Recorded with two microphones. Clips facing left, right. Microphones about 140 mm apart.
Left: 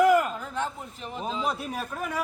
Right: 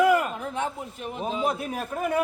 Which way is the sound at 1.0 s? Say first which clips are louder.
Right 2 dB; 10° right (ahead or behind).